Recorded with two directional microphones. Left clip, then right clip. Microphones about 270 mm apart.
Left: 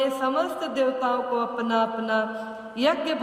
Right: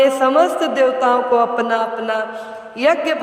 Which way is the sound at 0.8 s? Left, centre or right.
Right.